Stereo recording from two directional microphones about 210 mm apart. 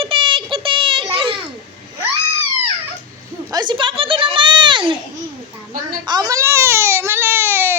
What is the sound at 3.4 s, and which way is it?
Children playing, 20° right (ahead or behind).